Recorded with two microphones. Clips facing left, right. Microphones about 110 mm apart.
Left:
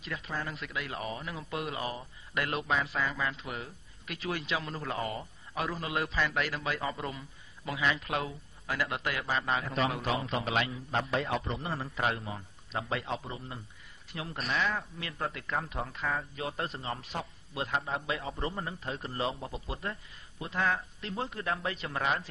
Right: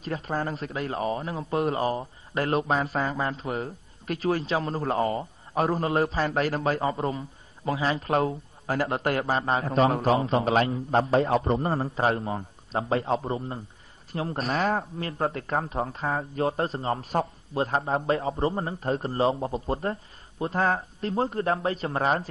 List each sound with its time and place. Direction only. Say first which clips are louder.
0.0 s speech: right 8 dB; 40° right (ahead or behind)